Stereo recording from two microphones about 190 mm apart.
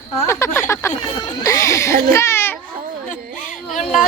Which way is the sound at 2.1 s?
15° left (ahead or behind).